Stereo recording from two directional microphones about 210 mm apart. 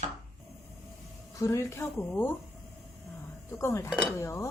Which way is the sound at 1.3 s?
15° left (ahead or behind).